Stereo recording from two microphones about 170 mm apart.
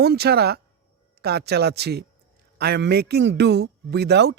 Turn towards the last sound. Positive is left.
turn(degrees=-80)